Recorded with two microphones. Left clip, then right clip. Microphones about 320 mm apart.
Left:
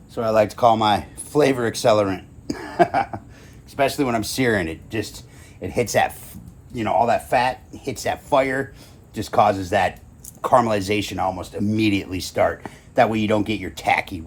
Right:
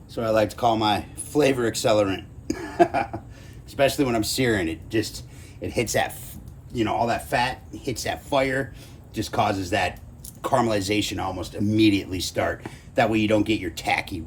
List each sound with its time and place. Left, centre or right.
0.1 s speech: centre
2.7 s a sound: left
3.8 s speech: centre